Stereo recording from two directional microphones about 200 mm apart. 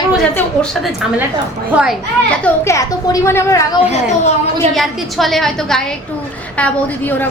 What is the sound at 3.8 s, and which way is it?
Speech, 35° left (ahead or behind).